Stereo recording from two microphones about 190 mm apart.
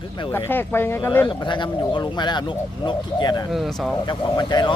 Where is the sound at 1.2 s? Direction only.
25° left (ahead or behind).